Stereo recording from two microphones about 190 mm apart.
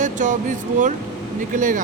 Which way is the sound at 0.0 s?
40° right (ahead or behind).